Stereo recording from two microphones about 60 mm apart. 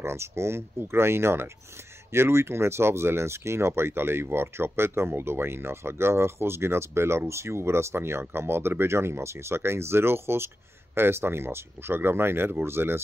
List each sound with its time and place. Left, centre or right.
0.0 s speech: right